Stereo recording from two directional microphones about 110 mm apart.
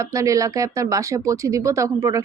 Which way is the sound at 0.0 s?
30° right (ahead or behind).